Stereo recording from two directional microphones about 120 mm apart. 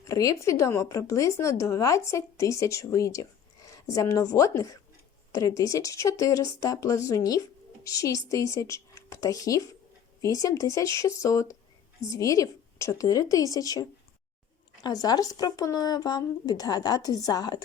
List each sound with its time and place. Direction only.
0.0 s speech: 25° left (ahead or behind)
14.8 s speech: 35° left (ahead or behind)